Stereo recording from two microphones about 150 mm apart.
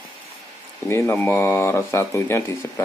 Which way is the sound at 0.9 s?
15° left (ahead or behind).